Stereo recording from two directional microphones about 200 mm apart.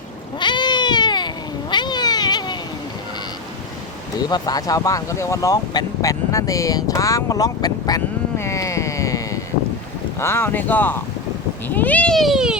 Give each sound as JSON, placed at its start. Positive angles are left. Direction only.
{"t": 0.3, "sound": "cat", "side_deg": 20}
{"t": 4.2, "sound": "speech", "side_deg": 20}